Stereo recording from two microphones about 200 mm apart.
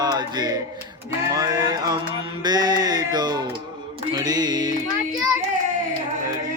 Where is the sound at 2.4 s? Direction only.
20° right (ahead or behind).